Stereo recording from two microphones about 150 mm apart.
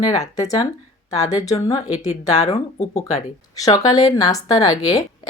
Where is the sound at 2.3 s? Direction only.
50° left (ahead or behind).